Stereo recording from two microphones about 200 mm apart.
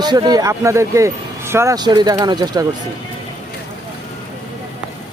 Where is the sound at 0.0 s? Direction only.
20° right (ahead or behind).